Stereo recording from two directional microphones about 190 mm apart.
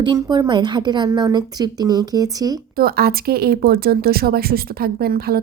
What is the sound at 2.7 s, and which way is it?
Speech, 55° right (ahead or behind).